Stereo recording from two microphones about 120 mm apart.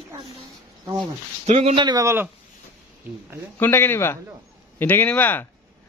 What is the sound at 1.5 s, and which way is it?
Speech, 75° right (ahead or behind).